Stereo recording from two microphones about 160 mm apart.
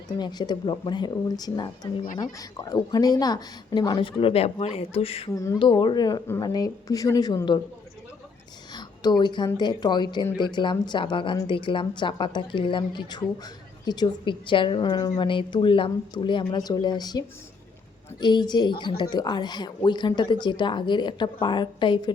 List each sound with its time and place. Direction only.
0.2 s a woman's voice: 25° left (ahead or behind)
8.7 s a sound: 25° left (ahead or behind)
9.6 s a woman's voice: 25° left (ahead or behind)